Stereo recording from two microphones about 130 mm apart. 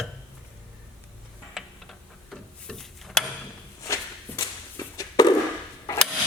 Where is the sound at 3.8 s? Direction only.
25° left (ahead or behind).